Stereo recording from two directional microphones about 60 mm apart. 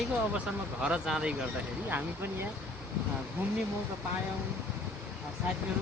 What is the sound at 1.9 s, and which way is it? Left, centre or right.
Speech, right.